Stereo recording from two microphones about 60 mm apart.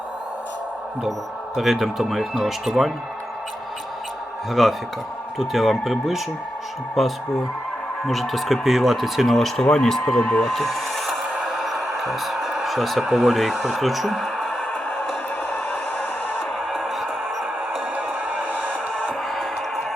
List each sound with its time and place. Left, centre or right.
1.5 s speech: centre
4.4 s speech: centre
11.4 s a sound: centre
13.7 s speech: centre
14.7 s music: left
15.7 s a sound: left
16.6 s music: centre
17.9 s a sound: right
18.7 s music: centre
19.3 s music: centre